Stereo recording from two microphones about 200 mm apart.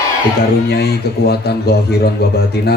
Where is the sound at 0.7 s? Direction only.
55° left (ahead or behind).